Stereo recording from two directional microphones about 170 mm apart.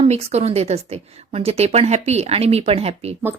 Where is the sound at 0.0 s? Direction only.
40° right (ahead or behind).